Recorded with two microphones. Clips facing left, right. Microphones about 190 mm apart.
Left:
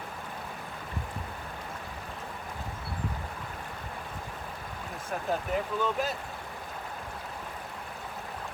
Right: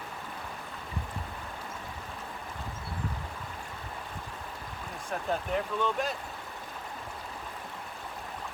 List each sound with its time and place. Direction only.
5.3 s speech: 5° left (ahead or behind)